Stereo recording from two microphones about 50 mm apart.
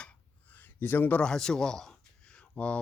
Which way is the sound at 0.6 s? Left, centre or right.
Left.